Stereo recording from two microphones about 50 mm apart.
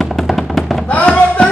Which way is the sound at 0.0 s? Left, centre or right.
Centre.